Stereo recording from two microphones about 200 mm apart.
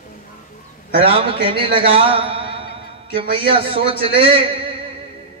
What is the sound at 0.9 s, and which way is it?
A man's voice, 25° right (ahead or behind).